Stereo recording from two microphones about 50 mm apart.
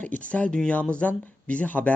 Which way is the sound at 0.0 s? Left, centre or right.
Left.